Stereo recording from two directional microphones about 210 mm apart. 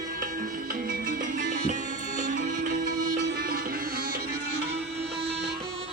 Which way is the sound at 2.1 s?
40° right (ahead or behind).